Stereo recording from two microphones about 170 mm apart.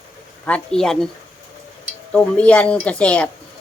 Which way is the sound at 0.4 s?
5° left (ahead or behind).